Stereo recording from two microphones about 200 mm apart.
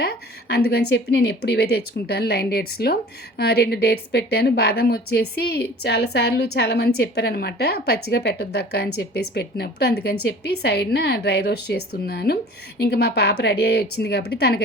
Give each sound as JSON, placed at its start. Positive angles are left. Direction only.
{"t": 0.0, "sound": "speech", "side_deg": 55}